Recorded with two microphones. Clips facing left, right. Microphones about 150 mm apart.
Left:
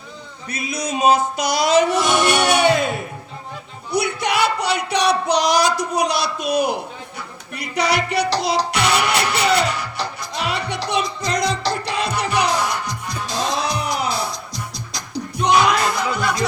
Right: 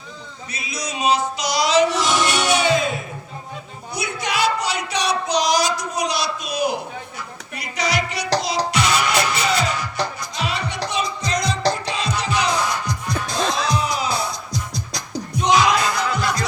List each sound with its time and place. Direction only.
0.5 s music: 55° left (ahead or behind)
3.9 s child singing: 60° left (ahead or behind)
10.3 s music: 60° left (ahead or behind)
15.4 s music: 60° left (ahead or behind)